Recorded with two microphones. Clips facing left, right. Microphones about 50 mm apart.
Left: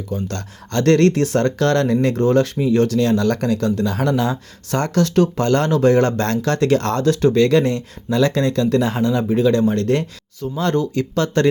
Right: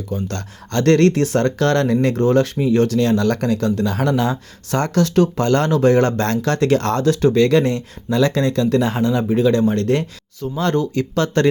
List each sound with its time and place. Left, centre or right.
0.1 s speech: right
10.6 s speech: right